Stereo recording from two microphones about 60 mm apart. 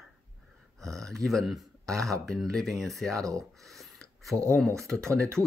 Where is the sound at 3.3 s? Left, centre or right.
Centre.